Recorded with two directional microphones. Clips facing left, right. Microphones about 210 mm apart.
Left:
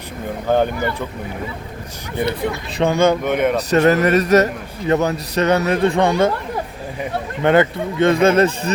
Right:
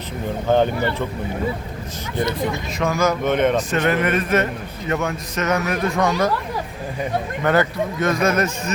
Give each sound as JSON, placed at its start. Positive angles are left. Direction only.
{"t": 2.7, "sound": "a man's voice", "side_deg": 30}
{"t": 3.2, "sound": "speech", "side_deg": 10}
{"t": 3.7, "sound": "a man's voice", "side_deg": 40}
{"t": 7.4, "sound": "speech", "side_deg": 25}